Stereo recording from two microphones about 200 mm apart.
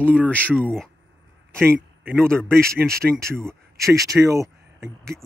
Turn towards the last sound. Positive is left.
turn(degrees=-15)  # may be behind; listen again after turning